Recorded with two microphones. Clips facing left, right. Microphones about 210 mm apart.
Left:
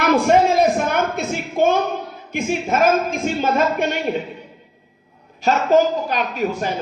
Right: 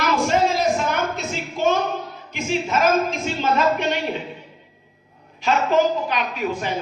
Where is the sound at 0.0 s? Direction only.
55° left (ahead or behind).